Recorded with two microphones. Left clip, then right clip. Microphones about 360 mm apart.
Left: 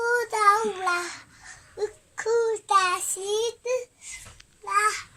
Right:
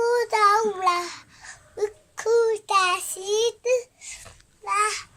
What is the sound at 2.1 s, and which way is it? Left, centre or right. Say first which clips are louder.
Child singing: right 3 dB; centre.